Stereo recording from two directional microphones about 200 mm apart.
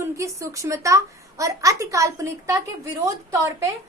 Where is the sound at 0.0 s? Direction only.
15° right (ahead or behind).